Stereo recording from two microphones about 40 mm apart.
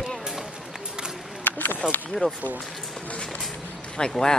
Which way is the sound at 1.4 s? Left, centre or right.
Left.